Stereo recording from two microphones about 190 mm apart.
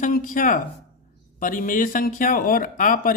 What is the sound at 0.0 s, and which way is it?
Speech, 45° left (ahead or behind).